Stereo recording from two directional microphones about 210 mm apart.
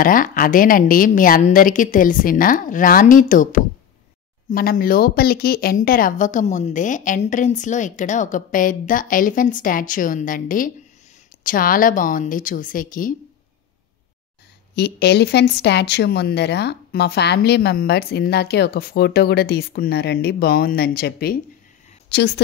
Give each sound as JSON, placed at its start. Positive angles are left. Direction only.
{"t": 0.0, "sound": "speech", "side_deg": 40}
{"t": 14.8, "sound": "speech", "side_deg": 50}